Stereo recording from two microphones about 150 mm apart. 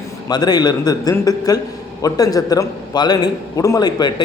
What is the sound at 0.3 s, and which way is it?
A man's voice, 25° left (ahead or behind).